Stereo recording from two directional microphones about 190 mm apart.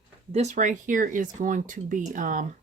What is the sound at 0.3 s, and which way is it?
Speech, 40° right (ahead or behind).